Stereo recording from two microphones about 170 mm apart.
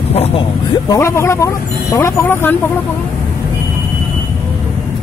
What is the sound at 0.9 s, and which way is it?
A man's voice, 15° left (ahead or behind).